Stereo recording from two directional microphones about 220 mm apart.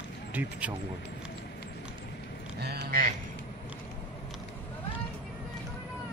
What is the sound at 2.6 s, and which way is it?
Speech, 45° right (ahead or behind).